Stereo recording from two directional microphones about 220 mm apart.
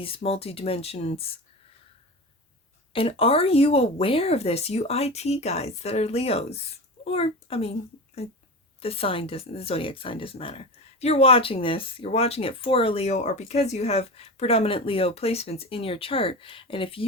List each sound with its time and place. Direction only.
0.0 s speech: 25° left (ahead or behind)
2.9 s a child's voice: 25° left (ahead or behind)